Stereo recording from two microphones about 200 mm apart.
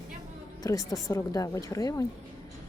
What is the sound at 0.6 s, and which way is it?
A woman's voice, 15° left (ahead or behind).